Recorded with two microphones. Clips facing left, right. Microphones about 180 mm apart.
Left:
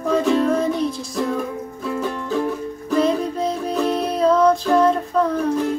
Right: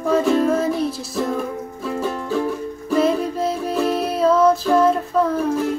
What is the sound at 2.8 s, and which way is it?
Music, 5° right (ahead or behind).